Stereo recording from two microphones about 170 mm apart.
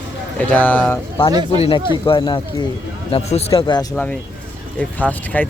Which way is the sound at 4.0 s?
5° left (ahead or behind).